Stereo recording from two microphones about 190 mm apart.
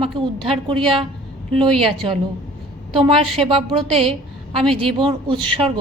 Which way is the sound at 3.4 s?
30° right (ahead or behind).